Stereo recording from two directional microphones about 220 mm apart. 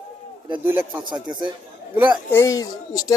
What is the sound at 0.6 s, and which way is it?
Speech, 10° right (ahead or behind).